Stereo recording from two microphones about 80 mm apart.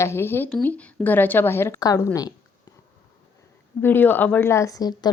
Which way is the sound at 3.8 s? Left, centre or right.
Left.